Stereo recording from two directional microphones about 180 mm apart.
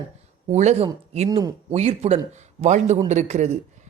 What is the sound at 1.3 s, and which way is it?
Speech, 20° right (ahead or behind).